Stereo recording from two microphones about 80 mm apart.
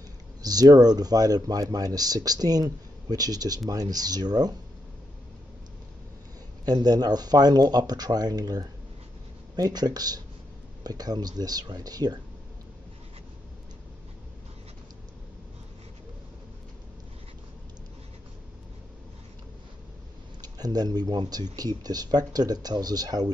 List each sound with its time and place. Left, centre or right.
0.4 s speech: right
6.6 s speech: right
20.4 s speech: right